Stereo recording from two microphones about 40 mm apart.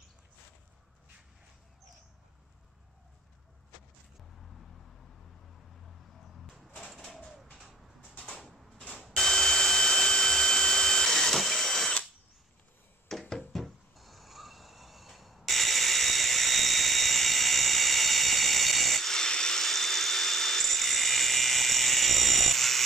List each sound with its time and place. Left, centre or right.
8.7 s fire alarm: left
9.1 s tools: centre
13.1 s a sound: centre